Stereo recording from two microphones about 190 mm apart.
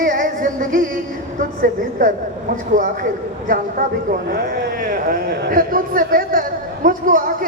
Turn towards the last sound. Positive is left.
turn(degrees=-45)  # may be behind; listen again after turning